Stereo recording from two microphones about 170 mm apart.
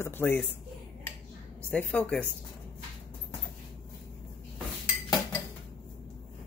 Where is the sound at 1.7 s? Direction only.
10° left (ahead or behind).